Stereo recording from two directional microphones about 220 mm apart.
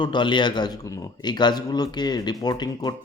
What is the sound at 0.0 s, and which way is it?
A man's voice, 20° left (ahead or behind).